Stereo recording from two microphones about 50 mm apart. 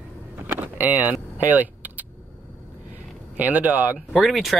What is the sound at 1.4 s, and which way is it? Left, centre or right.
Typing, right.